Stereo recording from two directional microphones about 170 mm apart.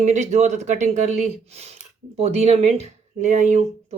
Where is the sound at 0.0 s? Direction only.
45° right (ahead or behind).